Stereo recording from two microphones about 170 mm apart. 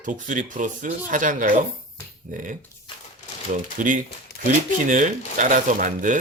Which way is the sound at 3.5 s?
50° right (ahead or behind).